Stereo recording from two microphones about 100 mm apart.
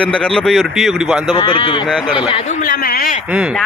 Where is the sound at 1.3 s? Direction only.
50° left (ahead or behind).